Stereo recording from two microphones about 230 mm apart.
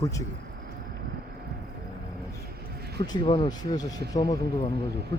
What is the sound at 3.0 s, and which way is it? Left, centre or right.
Speech, centre.